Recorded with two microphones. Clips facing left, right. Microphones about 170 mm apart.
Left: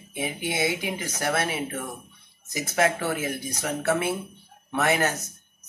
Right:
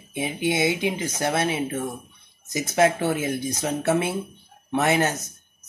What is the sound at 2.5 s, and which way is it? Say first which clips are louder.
Speech: right 4 dB; 25° right (ahead or behind).